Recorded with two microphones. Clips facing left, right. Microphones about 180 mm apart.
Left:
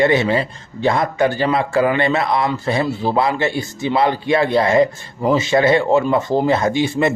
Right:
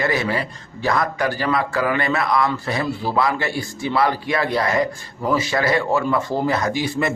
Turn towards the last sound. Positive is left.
turn(degrees=25)  # may be behind; listen again after turning